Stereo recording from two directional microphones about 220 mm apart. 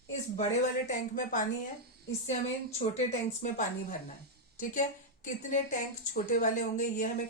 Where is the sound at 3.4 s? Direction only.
35° left (ahead or behind).